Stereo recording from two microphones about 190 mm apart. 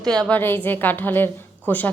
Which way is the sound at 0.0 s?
5° left (ahead or behind).